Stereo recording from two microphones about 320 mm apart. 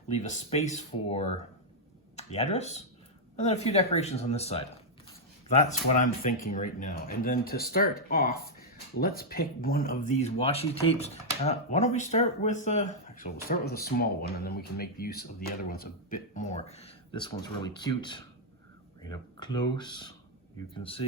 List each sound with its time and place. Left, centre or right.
0.2 s speech: left